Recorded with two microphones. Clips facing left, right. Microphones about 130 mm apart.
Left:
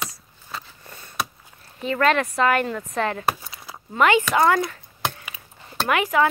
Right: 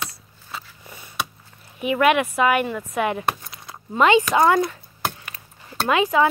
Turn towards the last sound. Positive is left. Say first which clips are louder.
# right 2 dB
turn(degrees=-20)  # may be behind; listen again after turning